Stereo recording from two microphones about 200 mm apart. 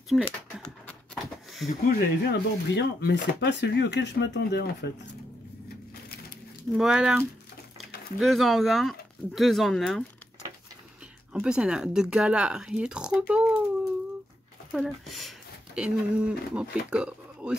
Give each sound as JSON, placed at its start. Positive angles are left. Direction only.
{"t": 0.1, "sound": "speech", "side_deg": 0}
{"t": 0.8, "sound": "a sound", "side_deg": 0}
{"t": 1.9, "sound": "speech", "side_deg": 50}
{"t": 6.8, "sound": "speech", "side_deg": -5}
{"t": 11.3, "sound": "speech", "side_deg": -5}
{"t": 14.7, "sound": "speech", "side_deg": 0}